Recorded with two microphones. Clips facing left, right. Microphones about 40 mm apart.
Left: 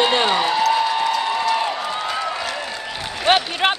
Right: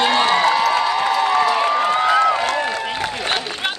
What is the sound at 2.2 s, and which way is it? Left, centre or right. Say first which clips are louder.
Applause: right 8 dB; right.